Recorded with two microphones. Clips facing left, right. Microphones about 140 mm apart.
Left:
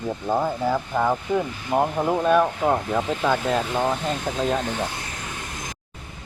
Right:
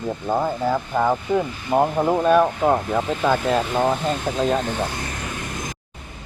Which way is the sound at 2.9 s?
5° right (ahead or behind).